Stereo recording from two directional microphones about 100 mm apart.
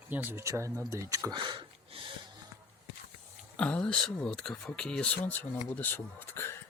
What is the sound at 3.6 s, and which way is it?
Speech, 10° left (ahead or behind).